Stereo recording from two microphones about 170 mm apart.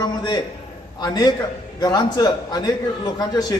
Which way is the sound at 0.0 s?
25° left (ahead or behind).